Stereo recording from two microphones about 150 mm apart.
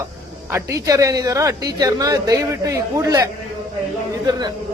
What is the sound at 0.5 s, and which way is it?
A man's voice, 20° right (ahead or behind).